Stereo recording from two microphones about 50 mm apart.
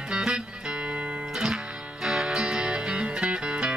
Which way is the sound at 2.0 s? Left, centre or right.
Centre.